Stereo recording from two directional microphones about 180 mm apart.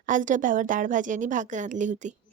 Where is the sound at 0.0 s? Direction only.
45° right (ahead or behind).